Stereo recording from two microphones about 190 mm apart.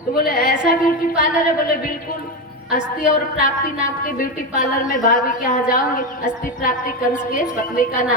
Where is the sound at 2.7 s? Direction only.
45° left (ahead or behind).